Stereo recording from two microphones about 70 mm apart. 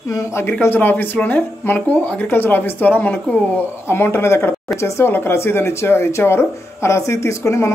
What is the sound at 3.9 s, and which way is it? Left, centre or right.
Speech, left.